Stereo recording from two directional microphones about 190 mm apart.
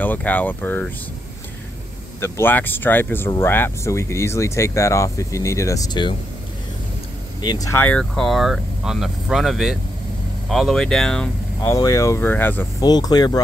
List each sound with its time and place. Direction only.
0.0 s speech: 10° left (ahead or behind)
2.1 s speech: 15° left (ahead or behind)
7.4 s speech: 20° left (ahead or behind)
11.7 s speech: 20° left (ahead or behind)
12.9 s speech: 20° left (ahead or behind)